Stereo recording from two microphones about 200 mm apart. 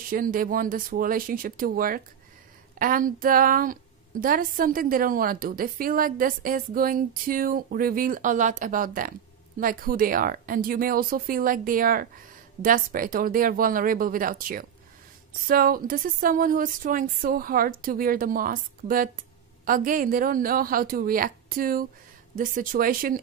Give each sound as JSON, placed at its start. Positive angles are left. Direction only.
{"t": 0.1, "sound": "a woman's voice", "side_deg": -45}